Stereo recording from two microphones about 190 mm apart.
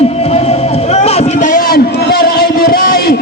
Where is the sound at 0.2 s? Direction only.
35° left (ahead or behind).